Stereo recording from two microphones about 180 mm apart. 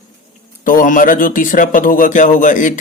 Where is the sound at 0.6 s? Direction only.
50° left (ahead or behind).